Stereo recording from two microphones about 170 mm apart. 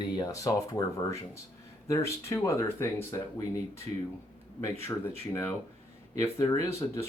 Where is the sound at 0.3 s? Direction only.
20° left (ahead or behind).